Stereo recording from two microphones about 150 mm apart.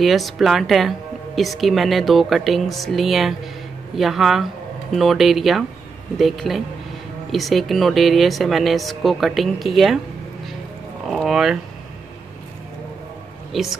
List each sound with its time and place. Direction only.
0.0 s speech: centre (ahead or behind)
11.1 s speech: centre (ahead or behind)
13.5 s speech: centre (ahead or behind)